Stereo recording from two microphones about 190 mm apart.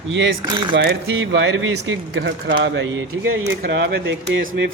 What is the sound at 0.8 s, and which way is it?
Speech, 65° right (ahead or behind).